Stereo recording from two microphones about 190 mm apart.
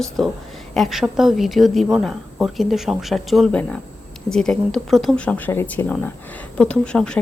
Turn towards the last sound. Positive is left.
turn(degrees=5)  # may be behind; listen again after turning